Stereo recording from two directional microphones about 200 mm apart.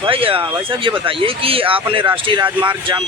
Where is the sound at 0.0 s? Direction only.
25° right (ahead or behind).